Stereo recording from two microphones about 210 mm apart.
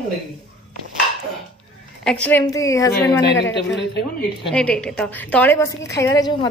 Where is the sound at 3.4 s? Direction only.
55° left (ahead or behind).